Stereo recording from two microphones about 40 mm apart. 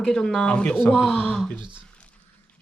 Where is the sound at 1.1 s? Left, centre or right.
Left.